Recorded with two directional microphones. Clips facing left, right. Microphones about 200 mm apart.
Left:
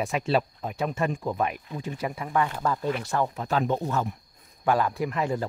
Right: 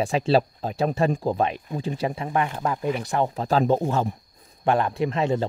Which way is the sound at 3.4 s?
35° right (ahead or behind).